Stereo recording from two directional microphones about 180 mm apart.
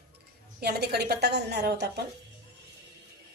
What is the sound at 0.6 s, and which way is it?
A woman's voice, 65° right (ahead or behind).